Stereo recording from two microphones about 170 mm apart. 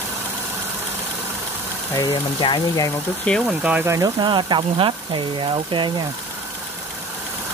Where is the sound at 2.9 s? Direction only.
5° left (ahead or behind).